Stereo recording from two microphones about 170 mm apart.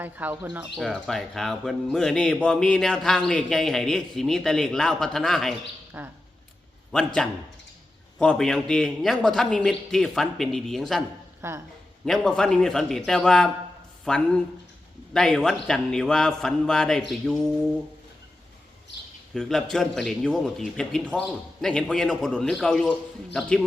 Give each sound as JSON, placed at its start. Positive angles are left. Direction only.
{"t": 0.0, "sound": "speech", "side_deg": -10}
{"t": 0.8, "sound": "speech", "side_deg": 0}
{"t": 6.0, "sound": "speech", "side_deg": -15}
{"t": 6.9, "sound": "speech", "side_deg": 5}
{"t": 11.4, "sound": "speech", "side_deg": -15}
{"t": 12.0, "sound": "speech", "side_deg": 5}
{"t": 19.3, "sound": "speech", "side_deg": 0}